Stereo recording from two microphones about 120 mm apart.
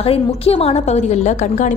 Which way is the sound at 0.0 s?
55° left (ahead or behind).